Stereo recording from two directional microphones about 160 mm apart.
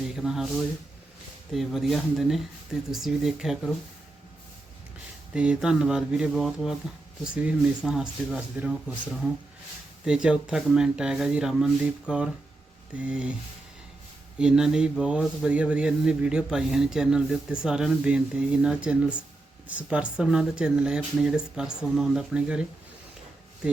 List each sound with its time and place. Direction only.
0.2 s speech: centre (ahead or behind)
5.3 s speech: 5° right (ahead or behind)
10.1 s speech: 5° right (ahead or behind)
14.3 s speech: 5° right (ahead or behind)